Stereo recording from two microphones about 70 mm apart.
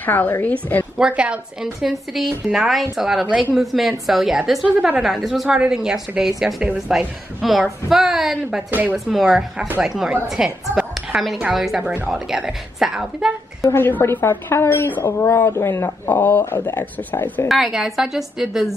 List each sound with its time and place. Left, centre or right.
0.0 s speech: left
0.9 s a woman's voice: centre
1.8 s a woman's voice: centre
4.6 s a woman's voice: right
5.0 s a woman's voice: centre
10.7 s a sound: centre
11.1 s a woman's voice: centre
13.6 s a woman's voice: left
15.1 s a woman's voice: left
15.4 s speech: left
17.5 s a woman's voice: centre